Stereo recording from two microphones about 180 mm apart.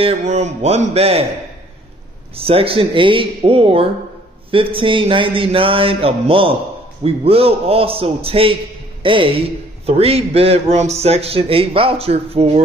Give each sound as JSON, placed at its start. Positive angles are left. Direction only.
{"t": 0.0, "sound": "a man's voice", "side_deg": -35}
{"t": 2.3, "sound": "a man's voice", "side_deg": -30}
{"t": 4.5, "sound": "a sound", "side_deg": -30}
{"t": 7.0, "sound": "a man's voice", "side_deg": -35}
{"t": 9.0, "sound": "a sound", "side_deg": -30}
{"t": 9.8, "sound": "a man's voice", "side_deg": -35}